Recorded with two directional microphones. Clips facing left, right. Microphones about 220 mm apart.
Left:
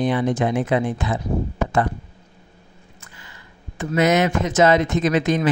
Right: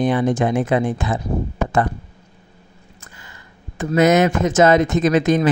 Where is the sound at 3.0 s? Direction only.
45° right (ahead or behind).